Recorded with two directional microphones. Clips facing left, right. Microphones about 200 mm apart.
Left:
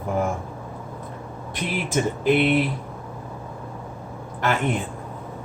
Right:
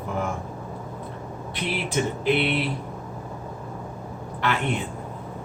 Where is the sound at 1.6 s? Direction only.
45° left (ahead or behind).